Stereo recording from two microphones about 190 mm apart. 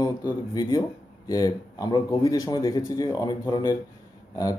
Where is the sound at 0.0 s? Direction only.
20° left (ahead or behind).